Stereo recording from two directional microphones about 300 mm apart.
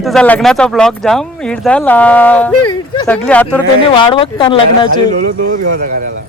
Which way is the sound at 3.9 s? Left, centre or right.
Centre.